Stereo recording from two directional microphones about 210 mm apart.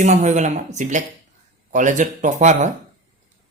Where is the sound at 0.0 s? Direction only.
35° right (ahead or behind).